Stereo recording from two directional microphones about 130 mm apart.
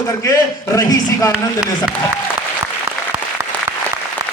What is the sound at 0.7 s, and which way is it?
Speech, 25° left (ahead or behind).